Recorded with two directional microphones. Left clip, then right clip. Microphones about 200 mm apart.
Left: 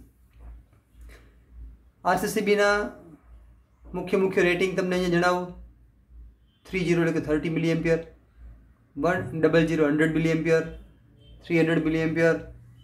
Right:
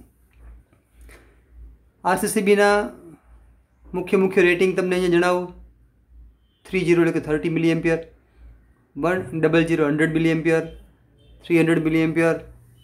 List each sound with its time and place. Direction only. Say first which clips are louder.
2.0 s speech: right 3 dB; 30° right (ahead or behind)
3.9 s speech: right 5 dB; 30° right (ahead or behind)
6.6 s speech: right 6 dB; 30° right (ahead or behind)
9.0 s speech: right 2 dB; 30° right (ahead or behind)